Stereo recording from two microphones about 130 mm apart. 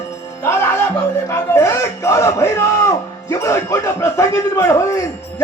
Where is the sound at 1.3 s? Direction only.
20° left (ahead or behind).